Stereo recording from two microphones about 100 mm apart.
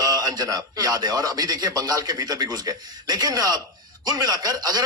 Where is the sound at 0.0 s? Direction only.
40° right (ahead or behind).